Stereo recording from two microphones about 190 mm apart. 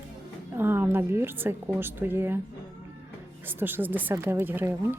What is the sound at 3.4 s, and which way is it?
A woman's voice, 10° right (ahead or behind).